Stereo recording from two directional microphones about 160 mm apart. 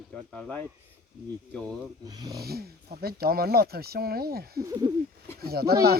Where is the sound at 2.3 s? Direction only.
75° right (ahead or behind).